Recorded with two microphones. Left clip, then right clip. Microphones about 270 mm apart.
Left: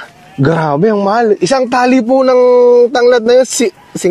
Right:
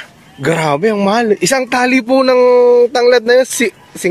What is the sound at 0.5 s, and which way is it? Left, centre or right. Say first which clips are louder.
A man's voice: left 1 dB; left.